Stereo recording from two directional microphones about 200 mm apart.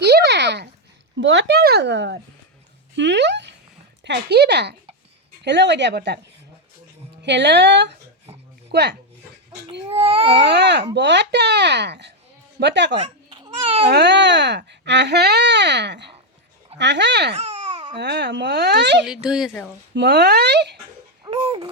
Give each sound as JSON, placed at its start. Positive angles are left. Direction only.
{"t": 0.0, "sound": "a sound", "side_deg": -55}
{"t": 1.1, "sound": "speech", "side_deg": -65}
{"t": 7.2, "sound": "speech", "side_deg": -60}
{"t": 9.9, "sound": "speech", "side_deg": -30}
{"t": 10.3, "sound": "a woman's voice", "side_deg": -60}
{"t": 13.0, "sound": "babbling", "side_deg": -25}
{"t": 13.8, "sound": "speech", "side_deg": -60}
{"t": 17.3, "sound": "a sound", "side_deg": -30}
{"t": 17.9, "sound": "speech", "side_deg": -60}
{"t": 19.0, "sound": "speech", "side_deg": -5}
{"t": 19.9, "sound": "speech", "side_deg": -60}
{"t": 21.2, "sound": "babbling", "side_deg": -25}